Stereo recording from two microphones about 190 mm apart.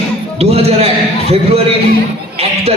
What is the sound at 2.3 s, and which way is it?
Speech, 30° right (ahead or behind).